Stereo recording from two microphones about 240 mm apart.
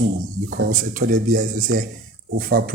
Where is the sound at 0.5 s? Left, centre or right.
Right.